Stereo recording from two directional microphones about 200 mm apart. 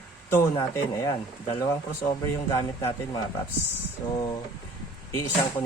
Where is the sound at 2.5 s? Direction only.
15° left (ahead or behind).